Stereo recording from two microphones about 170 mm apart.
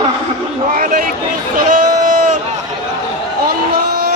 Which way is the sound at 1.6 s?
50° right (ahead or behind).